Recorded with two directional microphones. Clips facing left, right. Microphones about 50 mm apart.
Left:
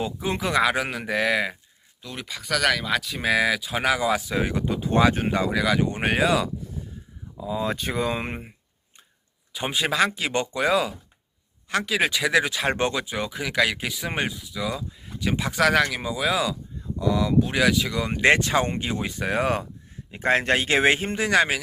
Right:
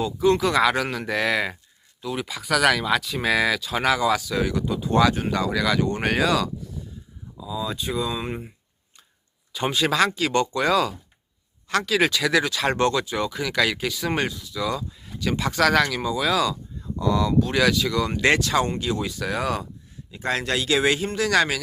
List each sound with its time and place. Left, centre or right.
0.0 s speech: centre
4.2 s speech: left
5.5 s speech: centre
6.8 s a sound: left
7.3 s speech: left
9.5 s speech: centre